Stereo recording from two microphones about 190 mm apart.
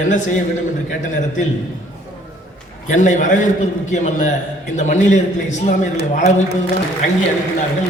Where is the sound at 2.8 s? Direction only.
40° left (ahead or behind).